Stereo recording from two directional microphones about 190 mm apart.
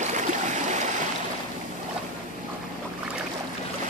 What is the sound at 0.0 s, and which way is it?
Stream, 40° right (ahead or behind).